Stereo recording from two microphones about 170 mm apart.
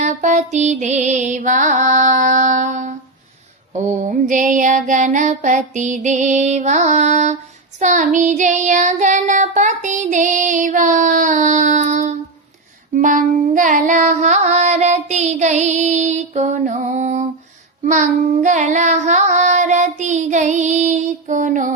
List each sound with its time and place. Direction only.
0.0 s music: 45° right (ahead or behind)
3.8 s child singing: 45° right (ahead or behind)
12.9 s music: 50° right (ahead or behind)
17.8 s child singing: 45° right (ahead or behind)